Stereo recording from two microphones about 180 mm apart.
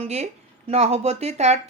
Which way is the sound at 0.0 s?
35° right (ahead or behind).